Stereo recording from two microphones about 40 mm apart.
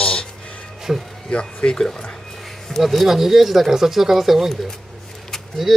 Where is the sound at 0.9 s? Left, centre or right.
Centre.